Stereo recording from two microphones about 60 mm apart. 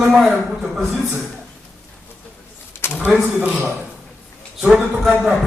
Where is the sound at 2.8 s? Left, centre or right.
Left.